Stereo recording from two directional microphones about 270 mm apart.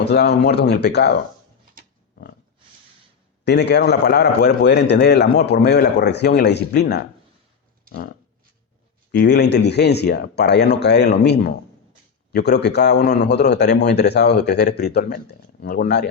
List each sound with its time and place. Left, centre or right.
0.0 s a man's voice: left
1.8 s pig: right
3.4 s a man's voice: left
9.1 s a man's voice: left